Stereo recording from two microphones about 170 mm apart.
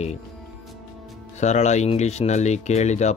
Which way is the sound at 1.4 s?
40° left (ahead or behind).